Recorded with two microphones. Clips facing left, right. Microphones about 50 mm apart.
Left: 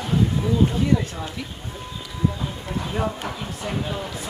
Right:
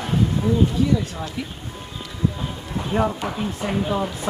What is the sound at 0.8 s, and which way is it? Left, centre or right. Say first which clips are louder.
Speech: right 1 dB; left.